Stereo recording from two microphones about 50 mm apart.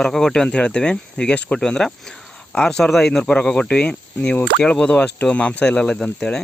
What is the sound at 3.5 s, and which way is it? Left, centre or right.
Speech, left.